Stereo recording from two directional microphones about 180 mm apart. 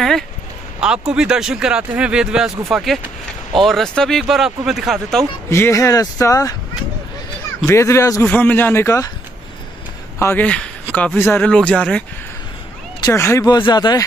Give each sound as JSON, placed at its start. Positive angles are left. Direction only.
{"t": 0.7, "sound": "speech", "side_deg": -5}
{"t": 5.5, "sound": "speech", "side_deg": 15}
{"t": 7.6, "sound": "speech", "side_deg": 15}
{"t": 10.1, "sound": "speech", "side_deg": 10}
{"t": 13.0, "sound": "speech", "side_deg": 15}